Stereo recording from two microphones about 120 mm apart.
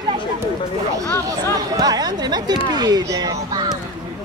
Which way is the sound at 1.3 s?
35° right (ahead or behind).